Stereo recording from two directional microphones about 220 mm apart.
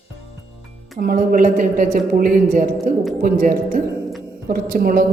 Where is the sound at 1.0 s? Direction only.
40° right (ahead or behind).